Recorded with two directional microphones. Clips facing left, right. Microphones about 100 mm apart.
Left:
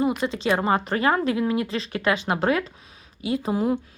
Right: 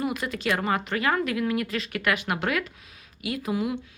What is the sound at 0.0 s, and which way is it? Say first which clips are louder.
A woman's voice: left 5 dB; 25° left (ahead or behind).